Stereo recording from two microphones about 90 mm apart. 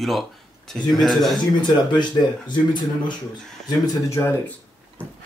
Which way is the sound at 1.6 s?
55° left (ahead or behind).